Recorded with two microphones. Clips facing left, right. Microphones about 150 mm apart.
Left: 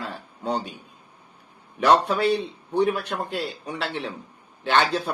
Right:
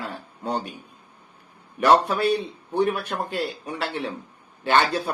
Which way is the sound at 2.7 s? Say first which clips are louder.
Even; 10° right (ahead or behind).